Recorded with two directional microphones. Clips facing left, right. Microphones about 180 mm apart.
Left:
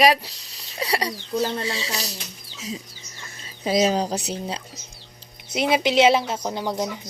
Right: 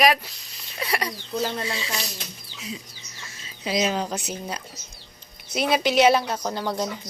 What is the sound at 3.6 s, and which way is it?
A woman's voice, 40° left (ahead or behind).